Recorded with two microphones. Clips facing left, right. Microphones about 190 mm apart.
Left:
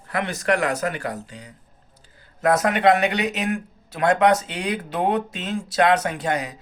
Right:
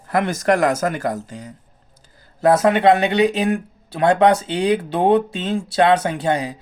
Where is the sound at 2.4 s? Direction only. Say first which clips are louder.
Right 4 dB; 30° right (ahead or behind).